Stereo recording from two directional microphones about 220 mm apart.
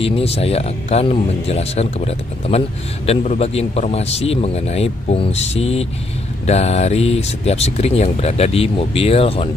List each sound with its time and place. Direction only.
0.0 s speech: 25° left (ahead or behind)